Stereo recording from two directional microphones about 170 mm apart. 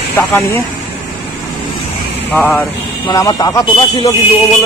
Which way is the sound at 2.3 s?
10° left (ahead or behind).